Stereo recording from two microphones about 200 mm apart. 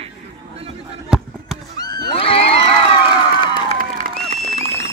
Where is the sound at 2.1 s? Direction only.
30° left (ahead or behind).